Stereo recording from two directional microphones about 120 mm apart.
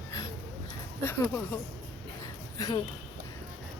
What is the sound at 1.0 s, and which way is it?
Speech, 20° left (ahead or behind).